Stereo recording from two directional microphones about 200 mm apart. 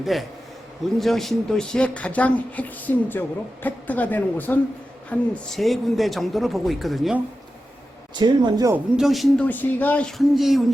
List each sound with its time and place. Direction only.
0.0 s speech: centre (ahead or behind)
8.1 s a man's voice: 20° right (ahead or behind)
9.0 s speech: centre (ahead or behind)